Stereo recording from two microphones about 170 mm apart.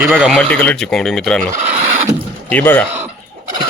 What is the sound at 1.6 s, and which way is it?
Vehicle, 40° right (ahead or behind).